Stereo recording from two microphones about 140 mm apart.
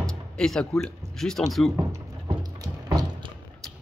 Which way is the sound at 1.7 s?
25° right (ahead or behind).